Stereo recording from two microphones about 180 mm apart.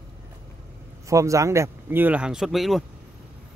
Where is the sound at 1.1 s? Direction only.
15° right (ahead or behind); by 2.8 s centre (ahead or behind).